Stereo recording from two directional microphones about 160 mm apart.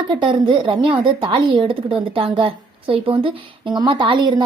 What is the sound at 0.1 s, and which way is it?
A woman's voice, 30° right (ahead or behind).